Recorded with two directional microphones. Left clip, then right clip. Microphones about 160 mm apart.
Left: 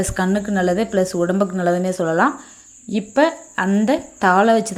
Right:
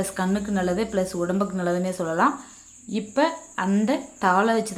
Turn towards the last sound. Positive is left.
turn(degrees=30)  # may be behind; listen again after turning